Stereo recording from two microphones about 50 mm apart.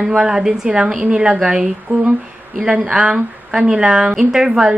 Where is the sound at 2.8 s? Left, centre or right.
Centre.